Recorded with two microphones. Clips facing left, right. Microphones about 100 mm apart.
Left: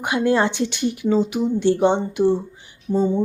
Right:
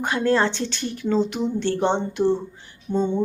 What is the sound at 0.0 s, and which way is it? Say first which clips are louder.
Speech: left 2 dB; 15° left (ahead or behind).